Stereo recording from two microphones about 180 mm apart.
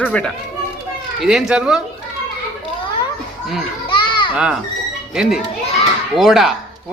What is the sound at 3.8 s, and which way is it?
Children playing, 25° left (ahead or behind).